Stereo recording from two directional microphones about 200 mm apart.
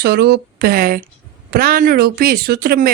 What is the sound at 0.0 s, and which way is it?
Speech, 55° right (ahead or behind).